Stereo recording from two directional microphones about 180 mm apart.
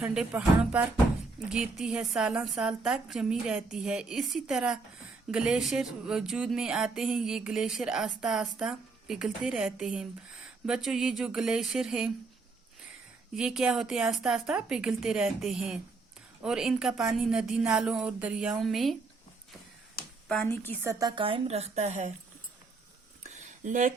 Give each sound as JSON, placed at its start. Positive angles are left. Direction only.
{"t": 0.0, "sound": "music", "side_deg": -5}
{"t": 1.5, "sound": "speech", "side_deg": -5}
{"t": 13.3, "sound": "speech", "side_deg": -5}
{"t": 20.2, "sound": "speech", "side_deg": 5}
{"t": 20.8, "sound": "music", "side_deg": -15}
{"t": 21.2, "sound": "a woman's voice", "side_deg": -30}
{"t": 23.2, "sound": "a sound", "side_deg": -40}